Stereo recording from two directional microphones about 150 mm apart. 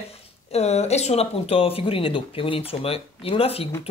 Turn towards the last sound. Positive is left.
turn(degrees=40)  # may be behind; listen again after turning